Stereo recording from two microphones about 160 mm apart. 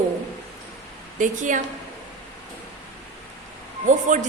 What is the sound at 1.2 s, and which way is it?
Speech, 50° right (ahead or behind).